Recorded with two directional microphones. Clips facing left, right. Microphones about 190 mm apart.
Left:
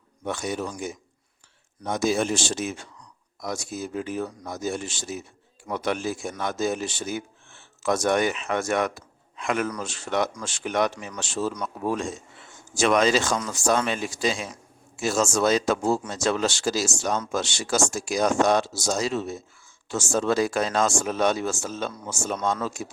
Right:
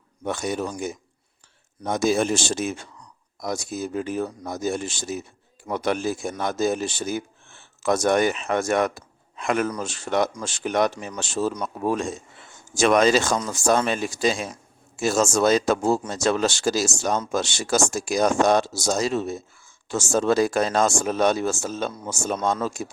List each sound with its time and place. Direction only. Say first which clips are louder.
0.3 s a man's voice: right 2 dB; 45° right (ahead or behind)